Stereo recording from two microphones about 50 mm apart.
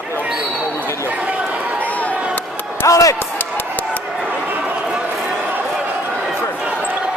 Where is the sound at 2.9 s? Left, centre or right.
Left.